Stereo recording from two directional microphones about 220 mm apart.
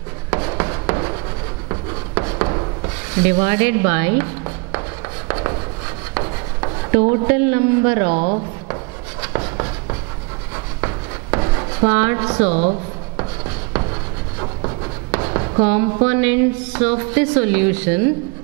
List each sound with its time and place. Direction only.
0.3 s a sound: 20° right (ahead or behind)
3.2 s speech: 10° right (ahead or behind)
5.3 s rub: 20° right (ahead or behind)
7.1 s speech: 10° right (ahead or behind)
9.4 s writing: 20° right (ahead or behind)
10.8 s a sound: 20° right (ahead or behind)
12.4 s speech: 35° right (ahead or behind)
15.2 s a sound: 25° right (ahead or behind)
15.6 s speech: 10° right (ahead or behind)